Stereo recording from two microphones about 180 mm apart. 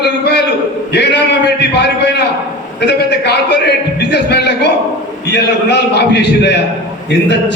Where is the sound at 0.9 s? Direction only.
70° left (ahead or behind).